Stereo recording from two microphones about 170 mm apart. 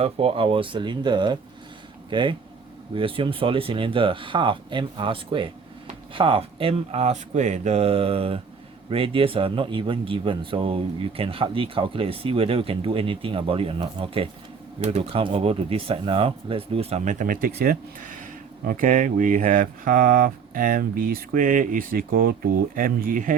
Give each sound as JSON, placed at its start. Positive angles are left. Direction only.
{"t": 0.0, "sound": "speech", "side_deg": -35}